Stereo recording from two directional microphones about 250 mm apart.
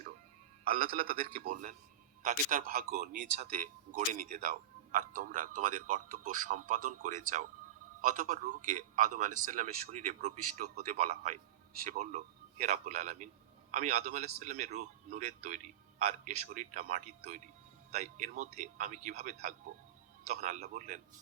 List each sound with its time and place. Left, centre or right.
0.7 s speech: right
1.0 s a man's voice: right
1.4 s a man's voice: right